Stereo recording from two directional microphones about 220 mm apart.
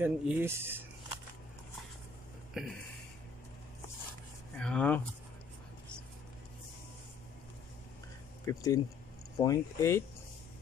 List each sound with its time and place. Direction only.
0.0 s speech: 10° right (ahead or behind)
2.6 s speech: centre (ahead or behind)
4.6 s speech: 5° left (ahead or behind)
8.5 s speech: 15° left (ahead or behind)